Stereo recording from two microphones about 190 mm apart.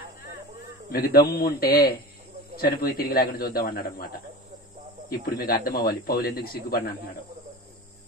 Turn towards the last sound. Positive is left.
turn(degrees=50)  # may be behind; listen again after turning